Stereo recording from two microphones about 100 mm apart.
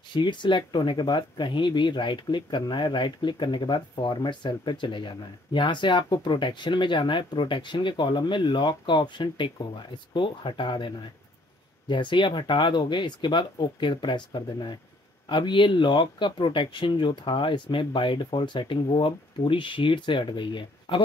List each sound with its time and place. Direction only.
0.1 s speech: 50° left (ahead or behind)
11.9 s speech: 50° left (ahead or behind)